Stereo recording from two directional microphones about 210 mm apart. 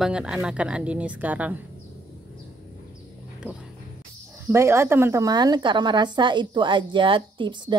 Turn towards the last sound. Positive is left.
turn(degrees=-20)  # may be behind; listen again after turning